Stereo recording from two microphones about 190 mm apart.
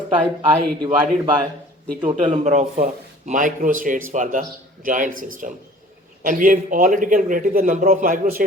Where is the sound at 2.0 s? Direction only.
30° right (ahead or behind).